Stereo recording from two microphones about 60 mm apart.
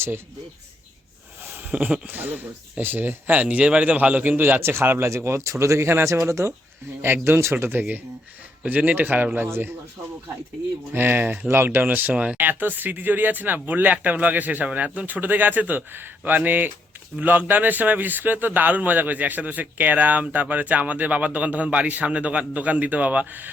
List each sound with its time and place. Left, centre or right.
1.5 s speech: right
3.4 s a man's voice: centre; by 6.5 s right
7.0 s speech: right
10.9 s speech: right
12.1 s speech: right